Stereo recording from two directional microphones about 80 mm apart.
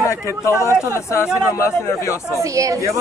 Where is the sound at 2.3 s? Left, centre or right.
Right.